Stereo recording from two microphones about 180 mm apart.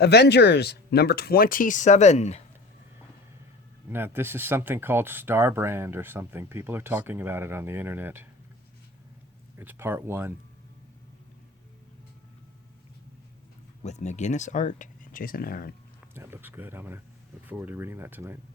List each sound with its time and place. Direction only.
0.0 s speech: 65° left (ahead or behind); by 2.4 s 40° left (ahead or behind)
3.9 s speech: 10° right (ahead or behind)
9.6 s speech: 15° right (ahead or behind)
13.8 s speech: 40° left (ahead or behind)
16.1 s speech: 15° right (ahead or behind)